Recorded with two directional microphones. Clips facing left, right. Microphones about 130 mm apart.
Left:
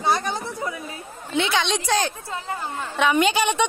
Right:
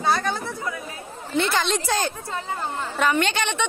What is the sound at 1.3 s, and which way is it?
A woman's voice, 5° right (ahead or behind).